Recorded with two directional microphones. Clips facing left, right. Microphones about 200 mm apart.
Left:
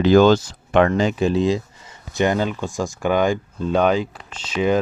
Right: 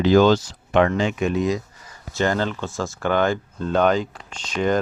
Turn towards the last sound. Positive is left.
turn(degrees=5)  # may be behind; listen again after turning